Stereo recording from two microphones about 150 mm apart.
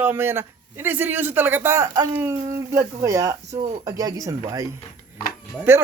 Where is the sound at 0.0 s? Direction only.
15° right (ahead or behind).